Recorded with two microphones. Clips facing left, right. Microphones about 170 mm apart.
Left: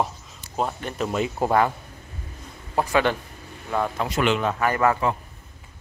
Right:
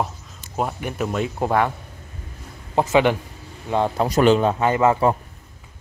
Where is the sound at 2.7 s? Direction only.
20° right (ahead or behind).